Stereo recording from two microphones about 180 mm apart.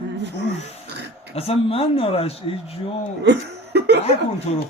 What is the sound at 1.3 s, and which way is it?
Speech, 35° left (ahead or behind).